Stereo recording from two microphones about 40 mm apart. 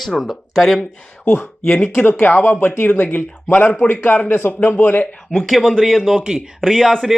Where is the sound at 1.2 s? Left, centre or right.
Left.